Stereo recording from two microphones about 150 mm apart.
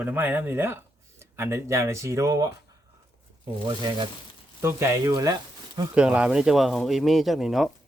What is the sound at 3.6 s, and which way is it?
Speech, 30° right (ahead or behind).